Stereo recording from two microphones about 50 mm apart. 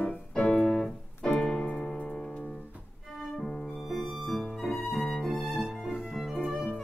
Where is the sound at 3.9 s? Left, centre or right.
Centre.